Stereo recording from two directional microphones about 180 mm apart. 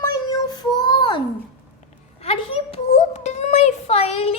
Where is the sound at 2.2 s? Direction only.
35° left (ahead or behind).